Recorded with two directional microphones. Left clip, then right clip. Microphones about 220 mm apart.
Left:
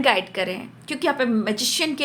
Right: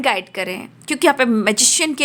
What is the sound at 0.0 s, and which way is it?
A woman's voice, 30° right (ahead or behind).